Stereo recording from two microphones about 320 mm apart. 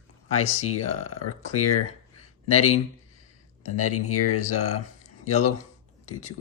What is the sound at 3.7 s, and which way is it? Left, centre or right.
Speech, left.